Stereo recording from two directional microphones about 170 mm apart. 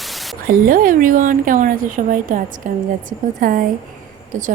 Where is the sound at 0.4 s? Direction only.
55° right (ahead or behind).